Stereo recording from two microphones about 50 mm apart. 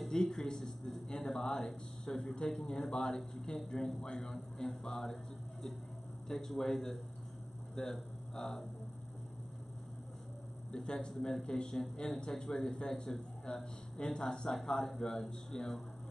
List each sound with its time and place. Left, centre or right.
0.1 s a man's voice: centre
10.7 s speech: centre